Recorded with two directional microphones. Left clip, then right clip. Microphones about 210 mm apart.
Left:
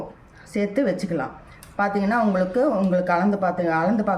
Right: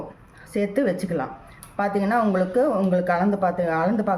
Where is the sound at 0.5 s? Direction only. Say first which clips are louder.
Even; 15° right (ahead or behind).